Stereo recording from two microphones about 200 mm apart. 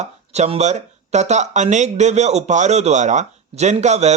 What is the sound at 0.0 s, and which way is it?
Speech, 35° right (ahead or behind).